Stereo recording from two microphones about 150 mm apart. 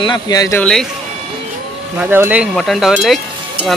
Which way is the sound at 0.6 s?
5° left (ahead or behind).